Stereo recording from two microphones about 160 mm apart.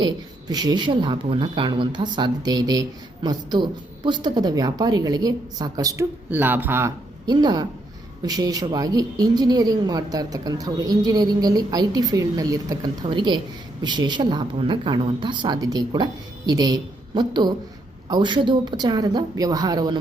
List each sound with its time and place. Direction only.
0.0 s speech: 25° right (ahead or behind)
7.3 s a woman's voice: 25° right (ahead or behind)